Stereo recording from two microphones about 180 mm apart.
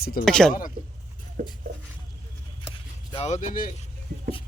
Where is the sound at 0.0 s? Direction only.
55° left (ahead or behind).